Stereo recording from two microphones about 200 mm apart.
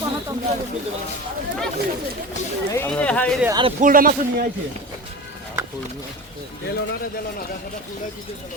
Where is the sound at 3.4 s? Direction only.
20° right (ahead or behind).